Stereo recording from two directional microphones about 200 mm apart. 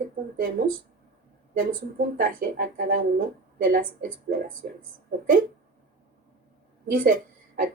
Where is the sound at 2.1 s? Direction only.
45° right (ahead or behind).